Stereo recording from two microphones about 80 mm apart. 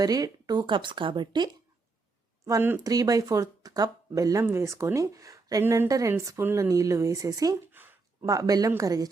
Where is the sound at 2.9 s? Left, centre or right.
Right.